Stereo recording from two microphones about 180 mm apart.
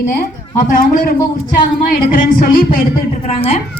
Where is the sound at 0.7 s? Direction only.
55° left (ahead or behind).